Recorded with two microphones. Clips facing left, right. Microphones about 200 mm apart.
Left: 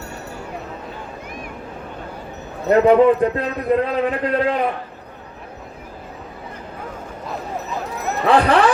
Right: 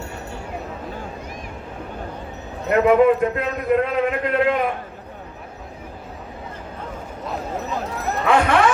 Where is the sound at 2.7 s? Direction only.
35° left (ahead or behind).